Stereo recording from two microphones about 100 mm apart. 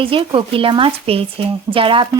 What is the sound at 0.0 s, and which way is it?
Speech, 60° right (ahead or behind).